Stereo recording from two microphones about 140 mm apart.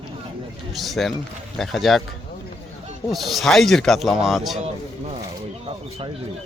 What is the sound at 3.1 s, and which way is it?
Speech, centre (ahead or behind).